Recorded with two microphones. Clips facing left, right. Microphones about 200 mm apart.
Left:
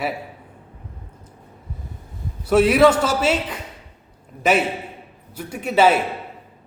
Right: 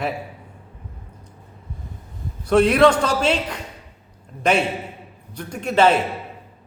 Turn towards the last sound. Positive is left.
turn(degrees=5)  # may be behind; listen again after turning